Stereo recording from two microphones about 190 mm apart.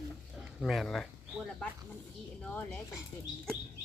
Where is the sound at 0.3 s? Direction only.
Centre (ahead or behind).